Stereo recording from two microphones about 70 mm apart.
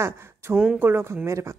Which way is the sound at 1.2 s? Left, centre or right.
Right.